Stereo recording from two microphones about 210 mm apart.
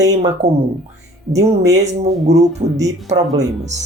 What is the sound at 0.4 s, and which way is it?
Speech, 30° right (ahead or behind).